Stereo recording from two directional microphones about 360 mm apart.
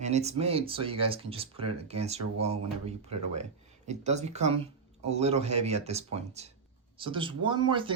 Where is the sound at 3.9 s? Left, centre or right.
Centre.